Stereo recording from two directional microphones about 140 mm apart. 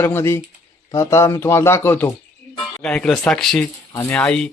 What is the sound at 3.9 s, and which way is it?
Speech, 15° left (ahead or behind).